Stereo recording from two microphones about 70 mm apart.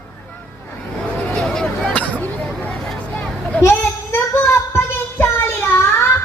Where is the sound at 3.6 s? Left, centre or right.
Left.